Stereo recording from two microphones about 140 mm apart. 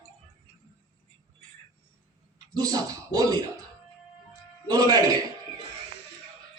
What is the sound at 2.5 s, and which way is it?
Speech, 25° right (ahead or behind).